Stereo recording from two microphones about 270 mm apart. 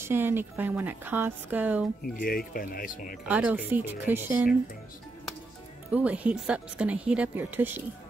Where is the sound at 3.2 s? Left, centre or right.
Centre.